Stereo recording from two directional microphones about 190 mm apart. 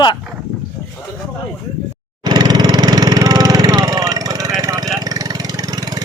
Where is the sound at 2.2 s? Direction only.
20° right (ahead or behind).